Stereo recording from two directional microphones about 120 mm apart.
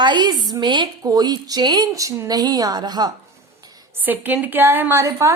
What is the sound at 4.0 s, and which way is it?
Speech, 15° right (ahead or behind).